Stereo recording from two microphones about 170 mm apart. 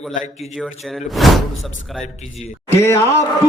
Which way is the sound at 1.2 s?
Centre (ahead or behind).